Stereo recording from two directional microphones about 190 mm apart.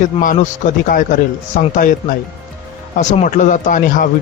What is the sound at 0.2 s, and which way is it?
A man's voice, 45° left (ahead or behind).